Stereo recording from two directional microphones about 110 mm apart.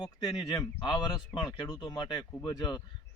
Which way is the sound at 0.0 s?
40° left (ahead or behind).